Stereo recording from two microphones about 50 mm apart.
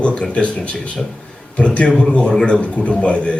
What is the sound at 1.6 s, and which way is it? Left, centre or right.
A man's voice, left.